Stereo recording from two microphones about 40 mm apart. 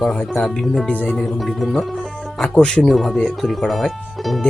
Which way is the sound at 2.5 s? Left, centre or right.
Centre.